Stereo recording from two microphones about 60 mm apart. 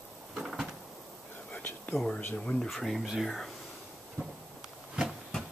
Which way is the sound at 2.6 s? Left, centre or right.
Centre.